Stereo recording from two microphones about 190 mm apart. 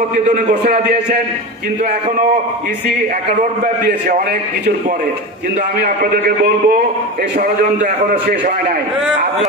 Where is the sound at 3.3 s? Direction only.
50° right (ahead or behind).